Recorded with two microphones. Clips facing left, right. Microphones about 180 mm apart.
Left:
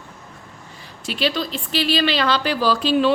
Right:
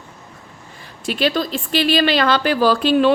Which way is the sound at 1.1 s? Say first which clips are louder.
Right 4 dB; 50° right (ahead or behind).